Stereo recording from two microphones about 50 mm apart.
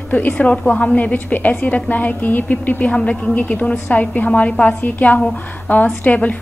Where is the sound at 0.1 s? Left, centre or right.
Left.